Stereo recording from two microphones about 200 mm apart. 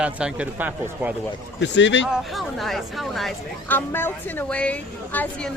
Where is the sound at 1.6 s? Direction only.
65° left (ahead or behind).